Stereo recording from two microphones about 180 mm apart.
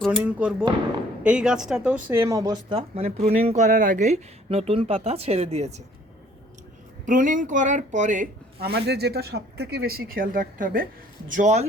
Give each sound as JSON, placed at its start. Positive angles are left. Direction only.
{"t": 0.2, "sound": "speech", "side_deg": -5}
{"t": 7.0, "sound": "speech", "side_deg": -45}
{"t": 8.7, "sound": "speech", "side_deg": -65}